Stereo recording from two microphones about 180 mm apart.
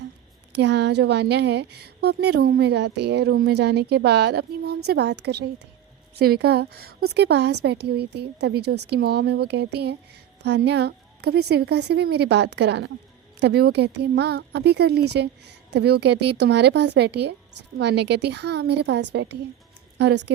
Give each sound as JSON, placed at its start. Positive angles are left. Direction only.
{"t": 0.5, "sound": "a woman's voice", "side_deg": -75}